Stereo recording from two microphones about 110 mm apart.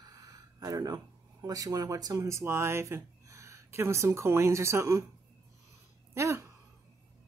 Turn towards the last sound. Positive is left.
turn(degrees=-25)  # may be behind; listen again after turning